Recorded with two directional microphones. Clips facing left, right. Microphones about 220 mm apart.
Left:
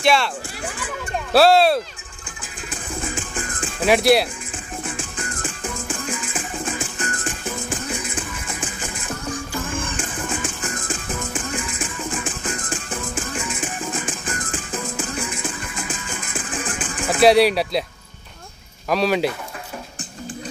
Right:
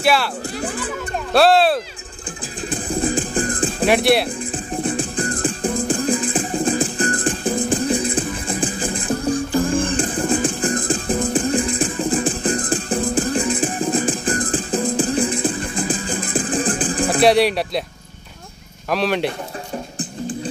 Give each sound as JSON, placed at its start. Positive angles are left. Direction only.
{"t": 0.0, "sound": "speech", "side_deg": -5}
{"t": 1.3, "sound": "speech", "side_deg": 0}
{"t": 2.7, "sound": "music", "side_deg": -35}
{"t": 3.8, "sound": "speech", "side_deg": 0}
{"t": 4.8, "sound": "music", "side_deg": -35}
{"t": 17.2, "sound": "speech", "side_deg": 0}
{"t": 18.9, "sound": "speech", "side_deg": 0}